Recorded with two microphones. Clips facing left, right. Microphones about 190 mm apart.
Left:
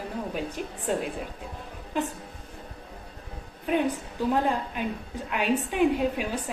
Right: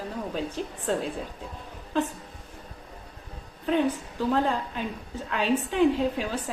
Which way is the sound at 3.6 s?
15° left (ahead or behind).